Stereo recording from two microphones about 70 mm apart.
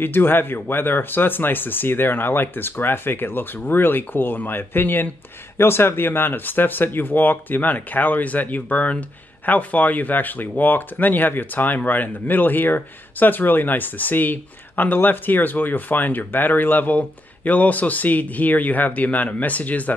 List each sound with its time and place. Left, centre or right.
0.0 s speech: left